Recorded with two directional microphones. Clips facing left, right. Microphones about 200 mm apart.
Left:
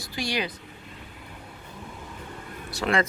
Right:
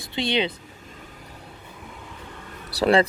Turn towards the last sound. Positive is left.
turn(degrees=-35)  # may be behind; listen again after turning